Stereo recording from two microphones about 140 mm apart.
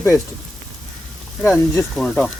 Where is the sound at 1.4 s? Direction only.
15° left (ahead or behind).